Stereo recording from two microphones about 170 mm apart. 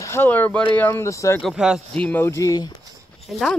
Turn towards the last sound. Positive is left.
turn(degrees=0)  # may be behind; listen again after turning